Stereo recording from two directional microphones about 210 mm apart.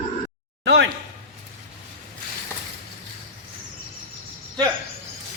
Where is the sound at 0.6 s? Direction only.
55° right (ahead or behind).